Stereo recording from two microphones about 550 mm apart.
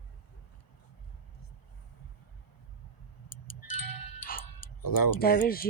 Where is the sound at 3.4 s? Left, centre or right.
Left.